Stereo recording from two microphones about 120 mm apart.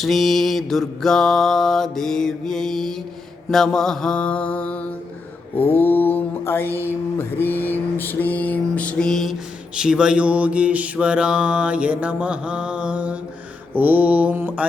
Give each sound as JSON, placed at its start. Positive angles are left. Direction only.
{"t": 0.0, "sound": "mantra", "side_deg": 0}
{"t": 6.7, "sound": "a sound", "side_deg": -20}
{"t": 7.2, "sound": "mantra", "side_deg": 15}
{"t": 9.7, "sound": "mantra", "side_deg": -5}